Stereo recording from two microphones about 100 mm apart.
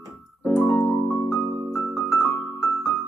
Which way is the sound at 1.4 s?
20° right (ahead or behind).